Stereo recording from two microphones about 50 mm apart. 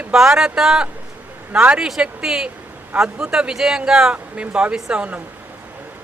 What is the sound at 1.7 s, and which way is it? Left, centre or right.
Speech, centre.